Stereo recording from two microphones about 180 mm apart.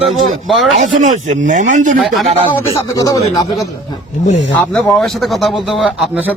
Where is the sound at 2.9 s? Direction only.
20° left (ahead or behind).